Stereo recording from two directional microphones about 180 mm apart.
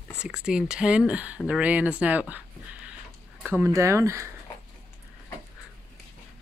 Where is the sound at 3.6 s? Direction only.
15° right (ahead or behind).